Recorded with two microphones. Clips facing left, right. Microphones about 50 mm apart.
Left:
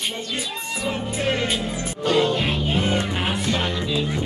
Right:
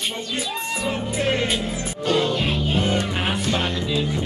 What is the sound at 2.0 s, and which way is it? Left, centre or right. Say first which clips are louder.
Music: left 1 dB; centre.